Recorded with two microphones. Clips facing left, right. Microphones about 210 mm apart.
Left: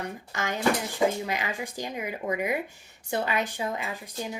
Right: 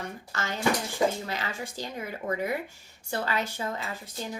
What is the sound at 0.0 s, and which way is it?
Speech, 15° left (ahead or behind).